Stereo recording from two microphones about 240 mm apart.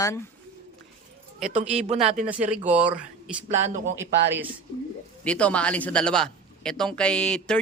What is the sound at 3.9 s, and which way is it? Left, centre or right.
Speech, right.